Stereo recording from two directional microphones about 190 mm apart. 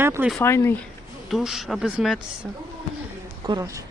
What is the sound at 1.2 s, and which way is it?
Speech, centre (ahead or behind).